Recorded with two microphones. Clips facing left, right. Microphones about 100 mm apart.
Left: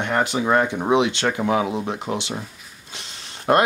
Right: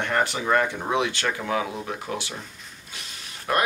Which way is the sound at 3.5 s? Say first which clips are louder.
Left 7 dB; 40° left (ahead or behind).